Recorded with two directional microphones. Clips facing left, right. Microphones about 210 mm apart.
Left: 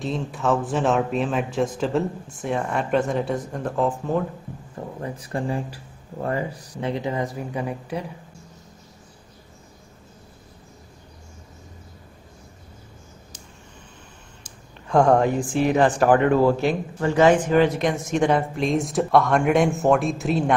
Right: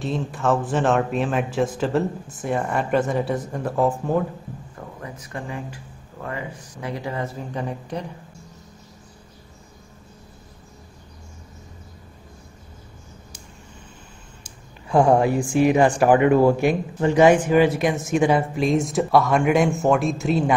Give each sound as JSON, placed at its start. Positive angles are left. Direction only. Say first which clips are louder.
{"t": 0.0, "sound": "speech", "louder": "right 1 dB", "side_deg": 0}
{"t": 5.0, "sound": "speech", "louder": "left 6 dB", "side_deg": 30}
{"t": 6.9, "sound": "speech", "louder": "left 2 dB", "side_deg": 20}
{"t": 14.4, "sound": "speech", "louder": "right 1 dB", "side_deg": -10}